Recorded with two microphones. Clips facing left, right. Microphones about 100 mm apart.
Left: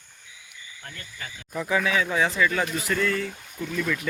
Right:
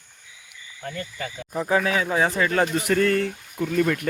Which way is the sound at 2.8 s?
65° right (ahead or behind).